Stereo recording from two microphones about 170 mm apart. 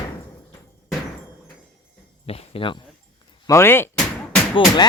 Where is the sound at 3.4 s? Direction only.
15° left (ahead or behind).